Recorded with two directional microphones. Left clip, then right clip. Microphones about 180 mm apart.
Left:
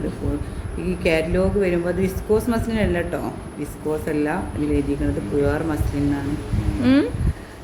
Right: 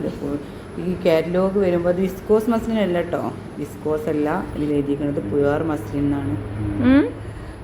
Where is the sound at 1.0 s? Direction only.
Centre (ahead or behind).